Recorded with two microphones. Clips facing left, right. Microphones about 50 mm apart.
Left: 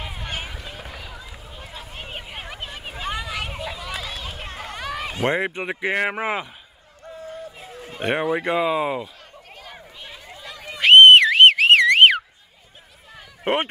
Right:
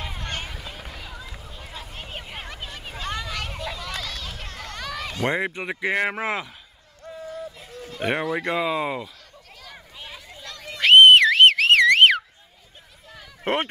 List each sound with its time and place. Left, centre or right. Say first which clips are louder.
0.0 s run: left 1 dB; centre
6.0 s speech: left 2 dB; centre
7.0 s a sound: right 1 dB; centre
8.0 s speech: left 2 dB; centre
10.3 s car alarm: left 3 dB; centre
13.4 s a sound: left 2 dB; centre